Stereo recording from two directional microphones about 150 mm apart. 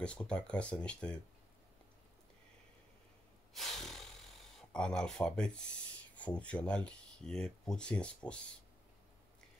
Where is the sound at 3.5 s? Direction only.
Centre (ahead or behind).